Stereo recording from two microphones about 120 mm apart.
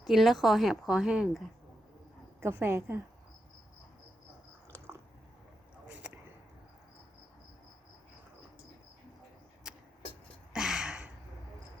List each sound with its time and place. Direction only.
0.0 s speech: centre (ahead or behind)
2.4 s a woman's voice: 20° right (ahead or behind)
5.9 s a sound: 10° right (ahead or behind)
10.5 s gasp: 5° right (ahead or behind)